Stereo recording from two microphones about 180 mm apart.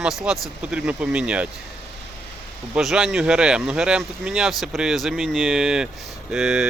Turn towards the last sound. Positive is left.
turn(degrees=-5)  # may be behind; listen again after turning